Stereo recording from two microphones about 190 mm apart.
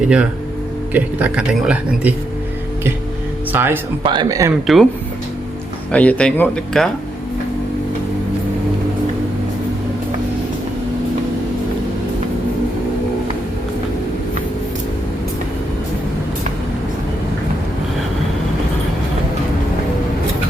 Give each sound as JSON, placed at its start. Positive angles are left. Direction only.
{"t": 0.9, "sound": "speech", "side_deg": -5}
{"t": 3.5, "sound": "speech", "side_deg": -10}
{"t": 4.0, "sound": "speech", "side_deg": -25}
{"t": 4.6, "sound": "speech", "side_deg": 0}
{"t": 5.9, "sound": "speech", "side_deg": 5}